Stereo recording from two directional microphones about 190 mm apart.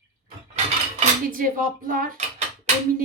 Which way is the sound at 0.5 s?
40° right (ahead or behind).